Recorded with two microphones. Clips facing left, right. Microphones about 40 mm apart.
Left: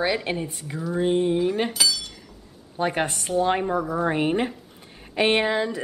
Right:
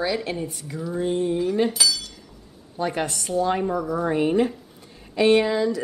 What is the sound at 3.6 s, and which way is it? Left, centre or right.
Speech, centre.